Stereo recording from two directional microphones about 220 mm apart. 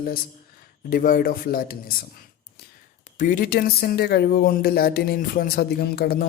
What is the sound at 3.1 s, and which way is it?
Speech, 35° left (ahead or behind).